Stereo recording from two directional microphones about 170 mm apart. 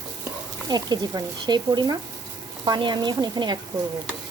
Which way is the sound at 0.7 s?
25° right (ahead or behind).